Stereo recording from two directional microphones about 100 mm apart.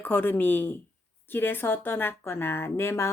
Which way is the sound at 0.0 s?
20° left (ahead or behind).